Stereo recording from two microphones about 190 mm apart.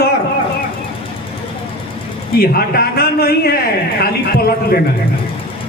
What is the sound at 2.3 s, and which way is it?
A man's voice, 55° left (ahead or behind).